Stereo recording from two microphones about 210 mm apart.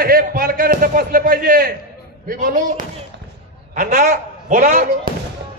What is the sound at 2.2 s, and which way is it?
A man's voice, 40° right (ahead or behind).